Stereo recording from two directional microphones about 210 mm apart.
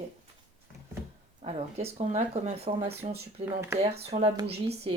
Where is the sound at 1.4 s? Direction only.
30° right (ahead or behind).